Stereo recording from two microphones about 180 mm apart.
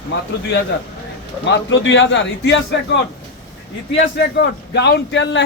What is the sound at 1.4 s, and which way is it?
A man's voice, 90° left.